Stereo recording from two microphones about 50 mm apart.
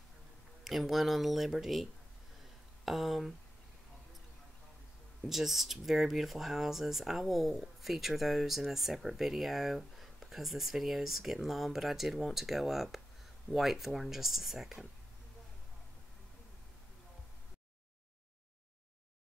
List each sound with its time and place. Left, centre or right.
0.7 s speech: centre
5.2 s speech: centre